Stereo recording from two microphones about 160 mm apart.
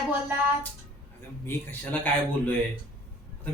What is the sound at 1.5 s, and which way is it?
Speech, 10° left (ahead or behind).